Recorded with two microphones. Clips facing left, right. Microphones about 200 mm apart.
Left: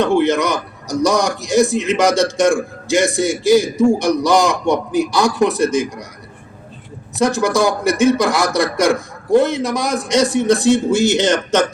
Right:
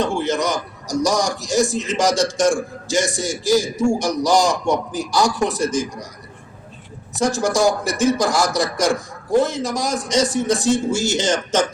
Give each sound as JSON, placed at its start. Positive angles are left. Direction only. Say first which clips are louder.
{"t": 0.0, "sound": "a man's voice", "louder": "left 6 dB", "side_deg": 60}
{"t": 7.2, "sound": "a man's voice", "louder": "left 3 dB", "side_deg": 60}